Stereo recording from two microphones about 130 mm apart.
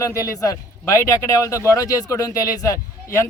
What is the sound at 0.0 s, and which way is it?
A man's voice, 25° left (ahead or behind).